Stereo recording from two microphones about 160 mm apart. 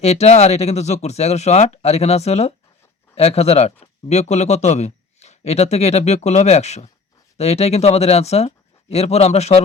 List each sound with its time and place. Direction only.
0.0 s a man's voice: 45° left (ahead or behind)